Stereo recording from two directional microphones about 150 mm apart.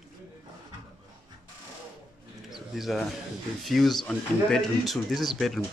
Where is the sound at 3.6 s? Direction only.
Centre (ahead or behind).